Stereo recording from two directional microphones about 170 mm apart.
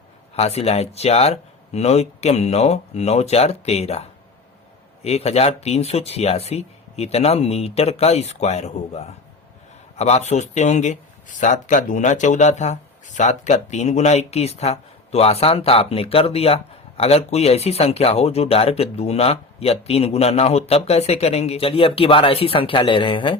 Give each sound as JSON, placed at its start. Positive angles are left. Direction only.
{"t": 0.3, "sound": "speech", "side_deg": 40}
{"t": 5.0, "sound": "speech", "side_deg": 35}